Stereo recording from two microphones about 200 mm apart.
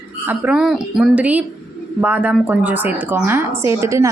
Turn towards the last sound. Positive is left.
turn(degrees=-15)  # may be behind; listen again after turning